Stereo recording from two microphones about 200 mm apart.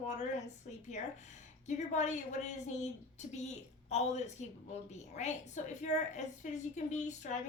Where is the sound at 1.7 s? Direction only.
35° left (ahead or behind).